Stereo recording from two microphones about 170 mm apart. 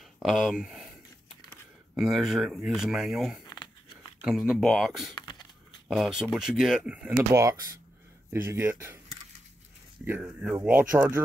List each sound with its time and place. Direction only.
0.2 s speech: centre (ahead or behind)
2.0 s speech: centre (ahead or behind)
5.1 s a sound: 25° left (ahead or behind)
5.9 s speech: 5° right (ahead or behind)
7.3 s speech: 20° right (ahead or behind)
10.0 s speech: 10° right (ahead or behind)